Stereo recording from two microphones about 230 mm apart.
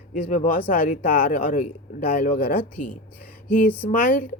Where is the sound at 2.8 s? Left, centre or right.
Left.